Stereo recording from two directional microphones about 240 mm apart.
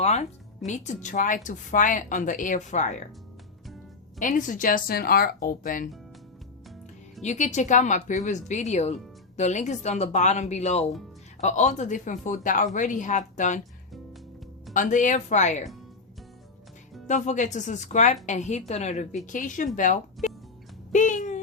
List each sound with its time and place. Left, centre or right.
0.0 s speech: left
4.2 s speech: left
7.2 s speech: left
14.7 s speech: left
17.1 s speech: left
20.2 s music: centre
20.9 s speech: left